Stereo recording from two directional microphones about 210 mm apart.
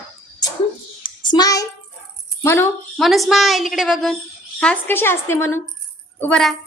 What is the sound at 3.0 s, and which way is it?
A woman's voice, centre (ahead or behind).